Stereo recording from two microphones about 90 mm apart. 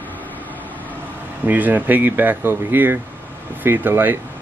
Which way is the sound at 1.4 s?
20° right (ahead or behind).